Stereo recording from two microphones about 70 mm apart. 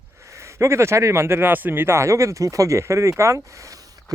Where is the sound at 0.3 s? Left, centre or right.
Right.